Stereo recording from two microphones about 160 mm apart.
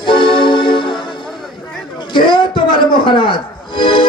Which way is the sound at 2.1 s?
30° left (ahead or behind).